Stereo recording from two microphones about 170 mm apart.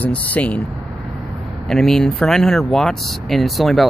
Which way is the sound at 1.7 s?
Centre (ahead or behind).